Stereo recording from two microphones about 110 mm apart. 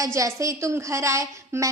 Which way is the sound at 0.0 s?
30° right (ahead or behind).